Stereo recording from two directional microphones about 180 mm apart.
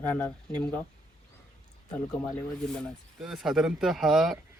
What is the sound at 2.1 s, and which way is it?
Speech, 15° left (ahead or behind).